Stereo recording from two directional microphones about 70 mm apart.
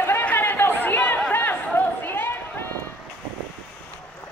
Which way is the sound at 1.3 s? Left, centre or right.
Left.